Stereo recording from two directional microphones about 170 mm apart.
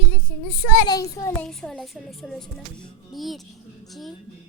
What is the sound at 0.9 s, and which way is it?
Speech, 20° left (ahead or behind).